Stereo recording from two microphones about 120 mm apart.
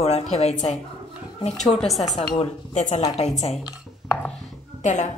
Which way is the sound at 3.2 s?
65° left (ahead or behind).